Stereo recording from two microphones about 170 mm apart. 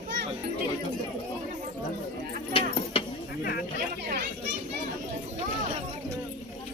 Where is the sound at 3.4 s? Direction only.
55° left (ahead or behind).